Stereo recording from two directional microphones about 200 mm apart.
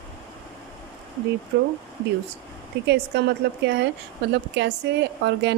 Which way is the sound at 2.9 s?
55° right (ahead or behind).